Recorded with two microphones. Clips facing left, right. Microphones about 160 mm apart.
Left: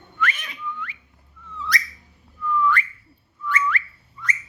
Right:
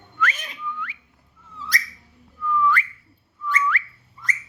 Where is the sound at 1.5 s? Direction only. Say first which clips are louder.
Left 3 dB; 40° right (ahead or behind).